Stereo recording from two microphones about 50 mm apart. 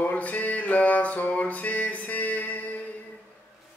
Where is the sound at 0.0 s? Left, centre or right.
Left.